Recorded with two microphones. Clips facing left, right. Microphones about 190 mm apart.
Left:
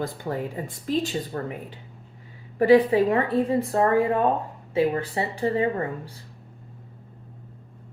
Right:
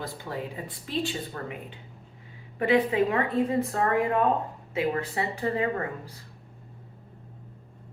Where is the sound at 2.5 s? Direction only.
35° left (ahead or behind).